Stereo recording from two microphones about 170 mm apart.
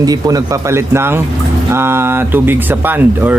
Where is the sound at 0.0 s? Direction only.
20° right (ahead or behind).